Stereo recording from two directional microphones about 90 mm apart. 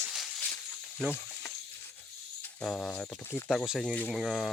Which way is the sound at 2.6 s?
5° left (ahead or behind).